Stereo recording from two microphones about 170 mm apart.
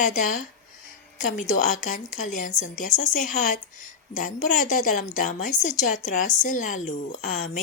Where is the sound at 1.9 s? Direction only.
50° left (ahead or behind).